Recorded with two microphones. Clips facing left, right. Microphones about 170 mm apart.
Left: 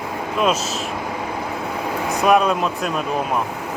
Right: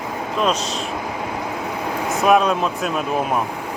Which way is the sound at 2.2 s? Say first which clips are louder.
Even; centre (ahead or behind).